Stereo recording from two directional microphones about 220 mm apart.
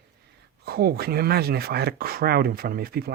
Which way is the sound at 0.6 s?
45° right (ahead or behind).